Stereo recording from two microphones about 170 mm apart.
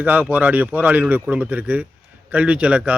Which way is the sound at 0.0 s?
10° right (ahead or behind).